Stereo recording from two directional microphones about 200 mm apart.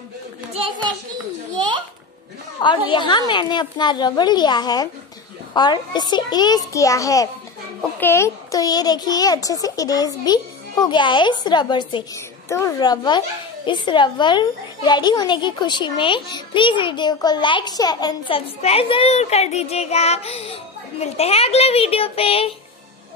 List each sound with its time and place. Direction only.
0.5 s a child's voice: 25° right (ahead or behind)
1.5 s a sound: 25° right (ahead or behind)
2.6 s a child's voice: 25° left (ahead or behind)